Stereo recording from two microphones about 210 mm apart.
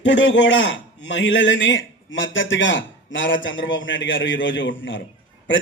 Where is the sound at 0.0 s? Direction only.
60° left (ahead or behind).